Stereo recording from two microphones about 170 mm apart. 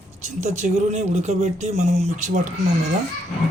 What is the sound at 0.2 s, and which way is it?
Speech, 45° right (ahead or behind).